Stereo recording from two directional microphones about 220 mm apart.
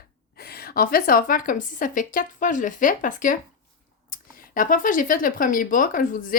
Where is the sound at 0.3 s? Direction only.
45° left (ahead or behind).